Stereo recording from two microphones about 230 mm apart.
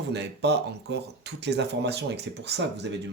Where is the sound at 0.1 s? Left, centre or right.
Right.